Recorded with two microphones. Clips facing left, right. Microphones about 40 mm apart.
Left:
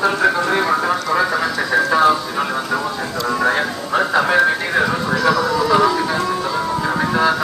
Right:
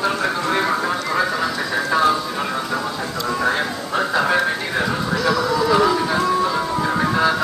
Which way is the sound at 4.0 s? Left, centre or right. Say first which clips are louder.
Left 3 dB; centre.